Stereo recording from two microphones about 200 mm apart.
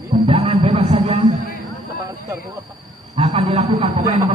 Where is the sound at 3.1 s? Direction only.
35° right (ahead or behind).